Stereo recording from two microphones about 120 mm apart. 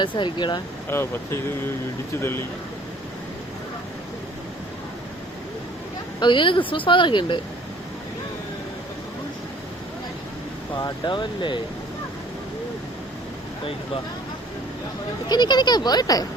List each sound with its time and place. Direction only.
0.0 s speech: 40° left (ahead or behind)
0.9 s speech: 20° left (ahead or behind)
6.1 s a woman's voice: 40° left (ahead or behind)
10.8 s speech: 40° left (ahead or behind)
15.3 s speech: 35° left (ahead or behind)